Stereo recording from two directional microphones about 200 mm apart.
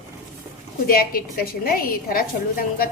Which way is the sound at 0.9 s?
45° left (ahead or behind).